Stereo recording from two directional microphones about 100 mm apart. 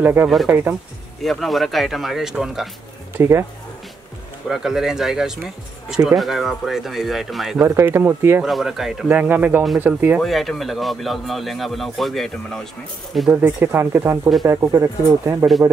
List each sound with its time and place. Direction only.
0.0 s speech: 20° right (ahead or behind)
1.2 s speech: centre (ahead or behind)
3.2 s speech: 25° right (ahead or behind)
4.5 s speech: 5° right (ahead or behind)
7.5 s speech: 20° right (ahead or behind)
8.4 s speech: 5° right (ahead or behind)
9.1 s speech: 20° right (ahead or behind)
10.2 s speech: centre (ahead or behind)
13.3 s speech: 20° right (ahead or behind)